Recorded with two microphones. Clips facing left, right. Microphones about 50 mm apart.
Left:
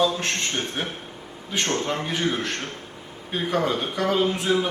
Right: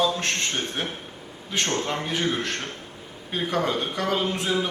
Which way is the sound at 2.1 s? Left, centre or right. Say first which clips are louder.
Left 1 dB; centre.